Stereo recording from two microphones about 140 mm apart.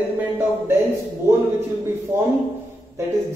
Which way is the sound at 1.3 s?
20° right (ahead or behind).